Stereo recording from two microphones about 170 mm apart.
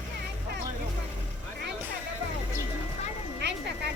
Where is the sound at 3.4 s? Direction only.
75° right (ahead or behind).